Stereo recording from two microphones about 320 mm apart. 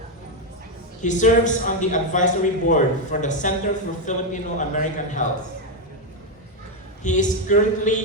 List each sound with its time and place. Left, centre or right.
1.0 s a man's voice: left
7.0 s a man's voice: left